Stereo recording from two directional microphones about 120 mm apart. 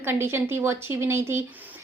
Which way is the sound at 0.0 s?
20° right (ahead or behind).